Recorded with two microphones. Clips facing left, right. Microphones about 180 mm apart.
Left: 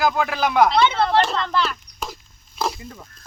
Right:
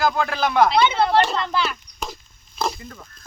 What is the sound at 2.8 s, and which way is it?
Speech, 15° left (ahead or behind).